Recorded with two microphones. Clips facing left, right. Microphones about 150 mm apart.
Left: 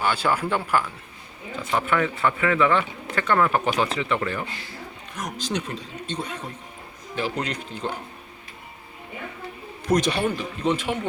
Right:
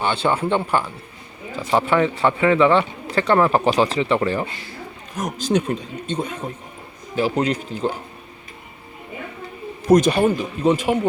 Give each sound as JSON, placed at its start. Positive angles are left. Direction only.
{"t": 0.0, "sound": "speech", "side_deg": -25}
{"t": 5.1, "sound": "speech", "side_deg": -45}
{"t": 7.5, "sound": "speech", "side_deg": -5}
{"t": 9.8, "sound": "speech", "side_deg": -45}